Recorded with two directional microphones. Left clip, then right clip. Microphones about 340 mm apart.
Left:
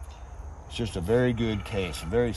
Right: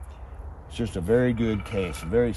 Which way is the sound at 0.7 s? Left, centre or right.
Left.